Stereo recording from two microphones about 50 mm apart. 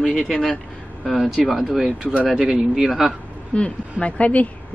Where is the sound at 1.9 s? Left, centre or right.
Right.